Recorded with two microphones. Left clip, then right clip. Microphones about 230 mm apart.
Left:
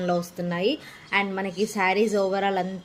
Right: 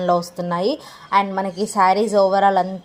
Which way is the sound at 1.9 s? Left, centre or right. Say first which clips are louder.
Right 6 dB; centre.